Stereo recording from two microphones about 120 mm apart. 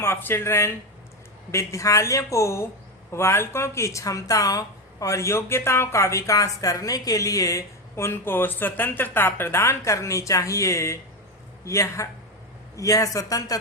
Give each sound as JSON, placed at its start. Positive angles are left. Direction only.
{"t": 0.0, "sound": "speech", "side_deg": 20}